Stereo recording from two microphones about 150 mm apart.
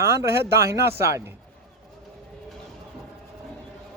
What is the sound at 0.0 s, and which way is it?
Speech, 20° right (ahead or behind).